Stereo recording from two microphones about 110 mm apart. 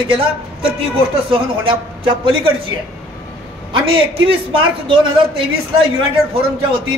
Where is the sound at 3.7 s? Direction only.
55° right (ahead or behind).